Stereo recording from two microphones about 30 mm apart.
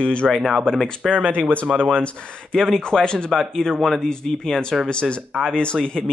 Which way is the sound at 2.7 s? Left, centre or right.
Left.